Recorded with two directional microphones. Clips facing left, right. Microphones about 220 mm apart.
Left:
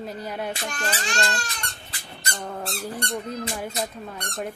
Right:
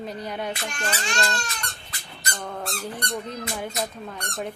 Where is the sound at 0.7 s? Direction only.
35° left (ahead or behind).